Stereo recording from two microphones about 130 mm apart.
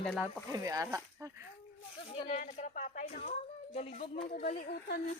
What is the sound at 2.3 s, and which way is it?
Speech, 85° left.